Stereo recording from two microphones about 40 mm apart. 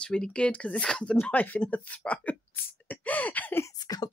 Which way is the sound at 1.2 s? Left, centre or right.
Left.